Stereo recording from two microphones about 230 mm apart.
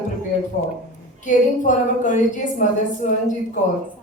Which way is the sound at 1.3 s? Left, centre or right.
Left.